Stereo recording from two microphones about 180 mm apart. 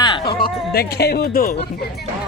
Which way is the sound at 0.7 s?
60° left (ahead or behind).